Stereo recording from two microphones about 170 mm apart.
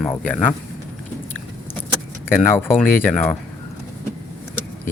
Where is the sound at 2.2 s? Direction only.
15° left (ahead or behind).